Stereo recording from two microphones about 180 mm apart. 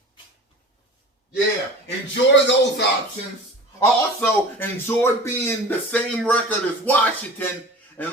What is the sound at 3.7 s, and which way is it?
Speech, 10° left (ahead or behind).